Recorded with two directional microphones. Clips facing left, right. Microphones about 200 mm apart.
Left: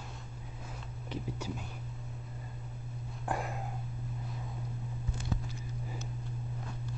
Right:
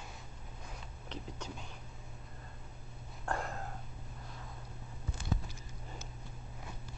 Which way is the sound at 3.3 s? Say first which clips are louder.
Left 2 dB; 10° left (ahead or behind).